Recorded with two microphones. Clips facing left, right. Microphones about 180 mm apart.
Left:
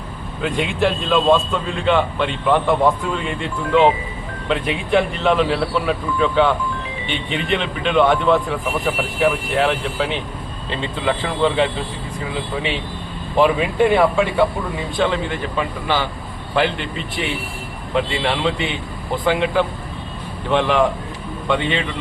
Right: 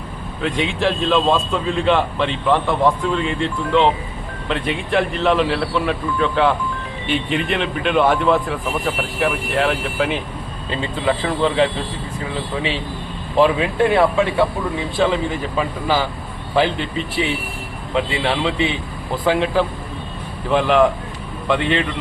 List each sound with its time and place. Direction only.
0.4 s a man's voice: centre (ahead or behind)
13.4 s a man's voice: centre (ahead or behind)
17.9 s a man's voice: centre (ahead or behind)